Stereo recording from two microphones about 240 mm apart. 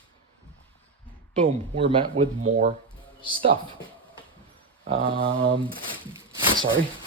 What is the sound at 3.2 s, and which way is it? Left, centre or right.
Speech, right.